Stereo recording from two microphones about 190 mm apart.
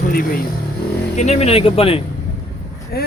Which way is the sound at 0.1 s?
50° left (ahead or behind).